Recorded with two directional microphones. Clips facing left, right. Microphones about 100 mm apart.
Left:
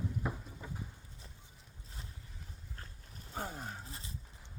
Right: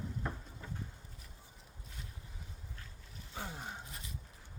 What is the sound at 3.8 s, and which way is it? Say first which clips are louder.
Dog: left 1 dB; 30° left (ahead or behind).